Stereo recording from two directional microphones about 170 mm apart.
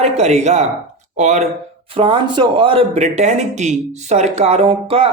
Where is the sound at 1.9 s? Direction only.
30° right (ahead or behind).